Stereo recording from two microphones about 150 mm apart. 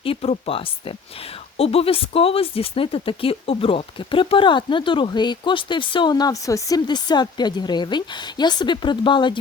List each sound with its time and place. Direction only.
0.0 s speech: 40° left (ahead or behind)